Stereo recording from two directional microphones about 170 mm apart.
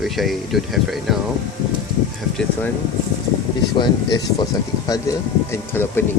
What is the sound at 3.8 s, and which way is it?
Speech, 25° left (ahead or behind).